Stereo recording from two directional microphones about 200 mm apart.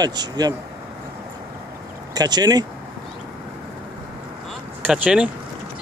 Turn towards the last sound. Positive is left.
turn(degrees=-5)  # may be behind; listen again after turning